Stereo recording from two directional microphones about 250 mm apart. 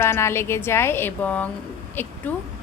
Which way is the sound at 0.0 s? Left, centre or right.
Centre.